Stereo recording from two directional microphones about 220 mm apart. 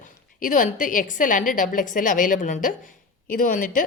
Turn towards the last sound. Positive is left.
turn(degrees=35)  # may be behind; listen again after turning